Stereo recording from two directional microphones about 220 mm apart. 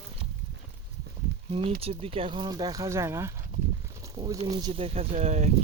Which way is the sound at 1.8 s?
25° right (ahead or behind).